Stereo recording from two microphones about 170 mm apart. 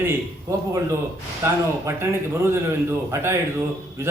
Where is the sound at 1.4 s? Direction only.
15° right (ahead or behind).